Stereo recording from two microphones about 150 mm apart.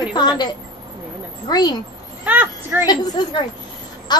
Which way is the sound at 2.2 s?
10° right (ahead or behind).